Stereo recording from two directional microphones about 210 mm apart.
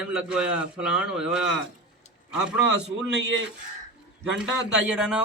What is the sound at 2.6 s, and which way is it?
Speech, 60° right (ahead or behind).